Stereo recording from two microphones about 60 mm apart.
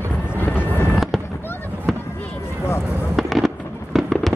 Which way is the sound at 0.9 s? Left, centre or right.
Centre.